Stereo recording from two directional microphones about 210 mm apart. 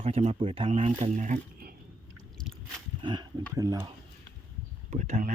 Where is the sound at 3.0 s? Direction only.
20° right (ahead or behind).